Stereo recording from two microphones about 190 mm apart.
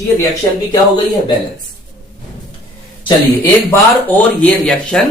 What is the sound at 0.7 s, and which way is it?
Speech, 25° left (ahead or behind).